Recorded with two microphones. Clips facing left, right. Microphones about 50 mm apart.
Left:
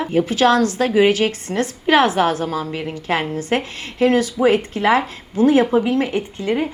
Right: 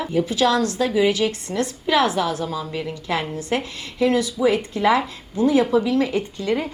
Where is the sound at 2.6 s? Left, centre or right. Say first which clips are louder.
Left 3 dB; left.